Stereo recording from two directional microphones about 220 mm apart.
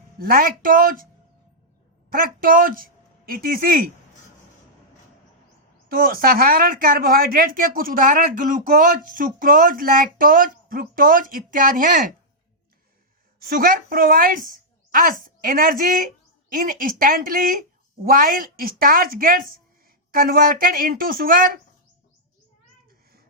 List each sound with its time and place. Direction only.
0.2 s speech: 40° right (ahead or behind)
2.0 s a man's voice: 40° right (ahead or behind)
5.9 s speech: 40° right (ahead or behind)
13.5 s a woman's voice: 40° right (ahead or behind)